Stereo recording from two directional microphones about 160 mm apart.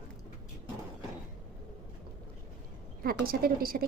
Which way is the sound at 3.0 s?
65° right (ahead or behind).